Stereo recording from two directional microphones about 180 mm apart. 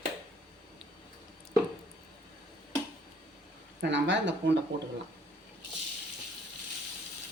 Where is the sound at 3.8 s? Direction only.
85° right.